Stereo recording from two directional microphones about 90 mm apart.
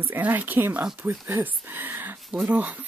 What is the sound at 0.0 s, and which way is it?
Speech, 20° right (ahead or behind).